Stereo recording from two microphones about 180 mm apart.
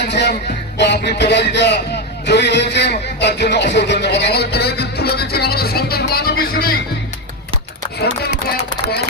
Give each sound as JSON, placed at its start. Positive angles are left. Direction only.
{"t": 0.0, "sound": "music", "side_deg": 65}
{"t": 2.2, "sound": "a man's voice", "side_deg": 70}